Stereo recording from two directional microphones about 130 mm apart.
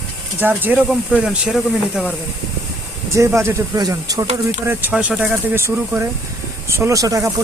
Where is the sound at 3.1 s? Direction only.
20° right (ahead or behind).